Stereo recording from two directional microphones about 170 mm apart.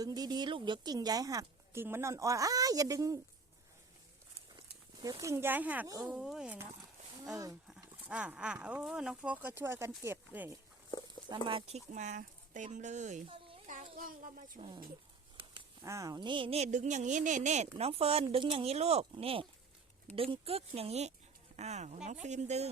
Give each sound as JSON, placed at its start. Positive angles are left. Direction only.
{"t": 0.0, "sound": "a woman's voice", "side_deg": -20}
{"t": 4.5, "sound": "speech", "side_deg": -25}
{"t": 7.7, "sound": "speech", "side_deg": -5}
{"t": 11.3, "sound": "a woman's voice", "side_deg": -30}
{"t": 11.9, "sound": "a woman's voice", "side_deg": -45}
{"t": 13.2, "sound": "a sound", "side_deg": -30}
{"t": 13.9, "sound": "a woman's voice", "side_deg": -55}
{"t": 15.8, "sound": "a woman's voice", "side_deg": -20}